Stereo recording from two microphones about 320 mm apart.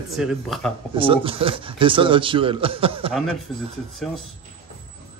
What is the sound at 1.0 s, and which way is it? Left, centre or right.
Speech, centre.